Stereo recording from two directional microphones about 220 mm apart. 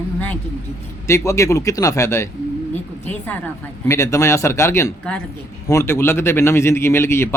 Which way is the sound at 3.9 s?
15° left (ahead or behind).